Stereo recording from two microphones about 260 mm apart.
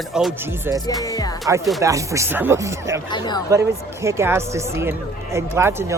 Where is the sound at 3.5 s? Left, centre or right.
Centre.